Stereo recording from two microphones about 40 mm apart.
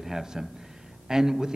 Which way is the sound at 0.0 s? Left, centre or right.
Centre.